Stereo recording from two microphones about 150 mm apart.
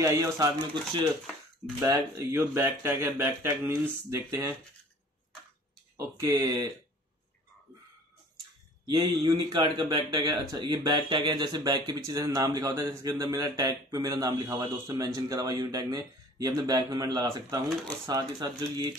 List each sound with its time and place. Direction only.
0.0 s a man's voice: 20° right (ahead or behind)
1.8 s speech: 20° right (ahead or behind)
5.9 s a man's voice: 20° right (ahead or behind)
8.8 s a man's voice: 30° right (ahead or behind)